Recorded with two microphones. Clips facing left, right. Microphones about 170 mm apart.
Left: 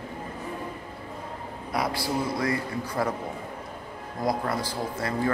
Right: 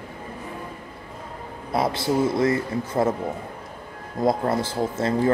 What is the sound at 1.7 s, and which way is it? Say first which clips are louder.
Speech: right 6 dB; 25° right (ahead or behind).